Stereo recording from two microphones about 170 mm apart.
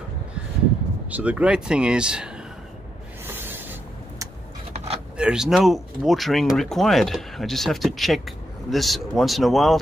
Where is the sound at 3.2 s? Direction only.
15° right (ahead or behind).